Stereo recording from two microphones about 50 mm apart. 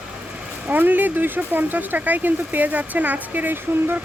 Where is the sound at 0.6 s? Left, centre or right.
Right.